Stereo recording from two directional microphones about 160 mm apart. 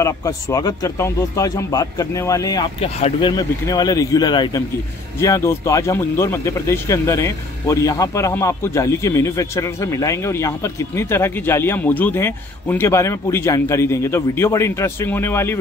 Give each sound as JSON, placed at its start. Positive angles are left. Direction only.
{"t": 0.0, "sound": "speech", "side_deg": 20}
{"t": 2.8, "sound": "speech", "side_deg": 35}